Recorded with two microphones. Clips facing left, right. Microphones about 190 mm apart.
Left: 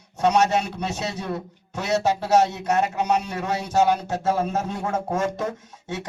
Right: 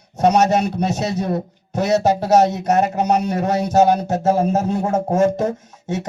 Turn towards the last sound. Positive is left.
turn(degrees=-45)  # may be behind; listen again after turning